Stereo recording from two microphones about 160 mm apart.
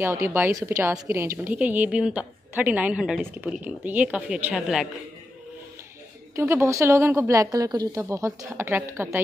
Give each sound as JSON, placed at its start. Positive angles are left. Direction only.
{"t": 0.0, "sound": "a woman's voice", "side_deg": -15}
{"t": 6.3, "sound": "a woman's voice", "side_deg": -15}